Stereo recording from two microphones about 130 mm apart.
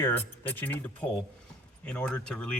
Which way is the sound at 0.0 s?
15° left (ahead or behind).